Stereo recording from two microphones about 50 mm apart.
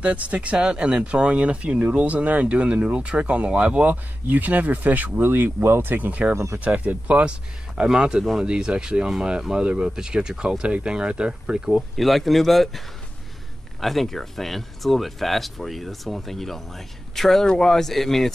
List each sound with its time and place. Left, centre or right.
0.0 s speech: right
6.3 s speech: right
6.6 s speech: right
12.0 s speech: centre